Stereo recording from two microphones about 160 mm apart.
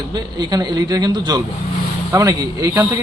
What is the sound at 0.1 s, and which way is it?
A man's voice, 25° right (ahead or behind).